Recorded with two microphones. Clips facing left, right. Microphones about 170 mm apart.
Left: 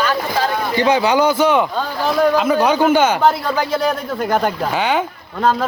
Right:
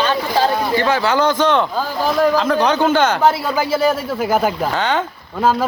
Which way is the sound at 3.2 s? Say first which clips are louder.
Even; 5° right (ahead or behind).